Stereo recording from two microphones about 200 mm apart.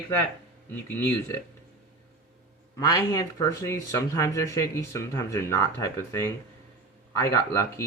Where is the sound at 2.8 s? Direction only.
15° left (ahead or behind).